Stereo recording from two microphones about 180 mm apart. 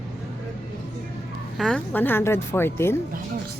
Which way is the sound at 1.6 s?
5° left (ahead or behind).